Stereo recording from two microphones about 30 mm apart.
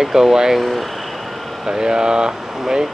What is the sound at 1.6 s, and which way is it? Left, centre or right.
Speech, right.